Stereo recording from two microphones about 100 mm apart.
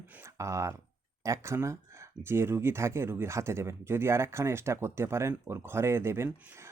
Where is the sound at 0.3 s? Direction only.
30° right (ahead or behind).